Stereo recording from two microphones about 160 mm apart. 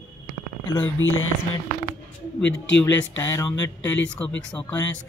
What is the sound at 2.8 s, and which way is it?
Speech, 20° left (ahead or behind).